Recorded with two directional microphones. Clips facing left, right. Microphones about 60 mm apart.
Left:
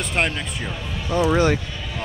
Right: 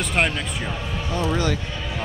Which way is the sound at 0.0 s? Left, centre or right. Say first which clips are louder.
Right 1 dB; centre.